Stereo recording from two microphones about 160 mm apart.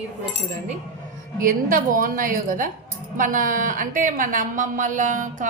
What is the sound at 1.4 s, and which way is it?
A woman's voice, 60° right (ahead or behind).